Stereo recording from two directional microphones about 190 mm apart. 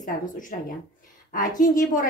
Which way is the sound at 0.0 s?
45° left (ahead or behind).